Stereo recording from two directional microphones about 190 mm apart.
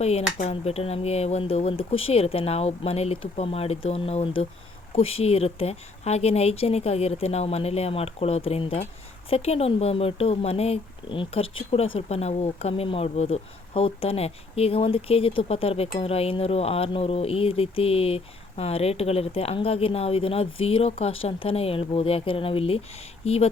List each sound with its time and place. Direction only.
0.0 s speech: 35° left (ahead or behind)